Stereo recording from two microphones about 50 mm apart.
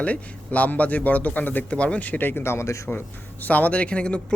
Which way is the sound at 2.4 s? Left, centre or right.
Left.